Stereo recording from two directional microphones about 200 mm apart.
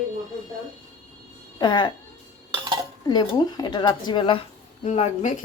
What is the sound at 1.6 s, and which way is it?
Speech, 25° left (ahead or behind).